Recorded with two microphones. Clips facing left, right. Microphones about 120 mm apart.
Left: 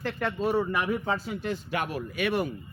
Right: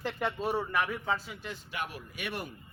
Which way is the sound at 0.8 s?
35° left (ahead or behind).